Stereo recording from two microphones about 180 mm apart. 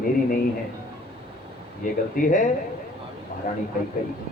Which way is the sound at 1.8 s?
45° left (ahead or behind).